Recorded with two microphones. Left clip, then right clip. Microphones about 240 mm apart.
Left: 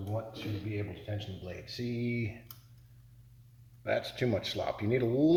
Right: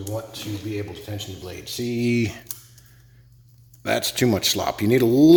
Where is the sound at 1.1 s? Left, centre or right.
Right.